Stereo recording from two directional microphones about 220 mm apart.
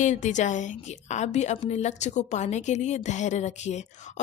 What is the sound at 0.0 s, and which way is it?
A woman's voice, 35° left (ahead or behind).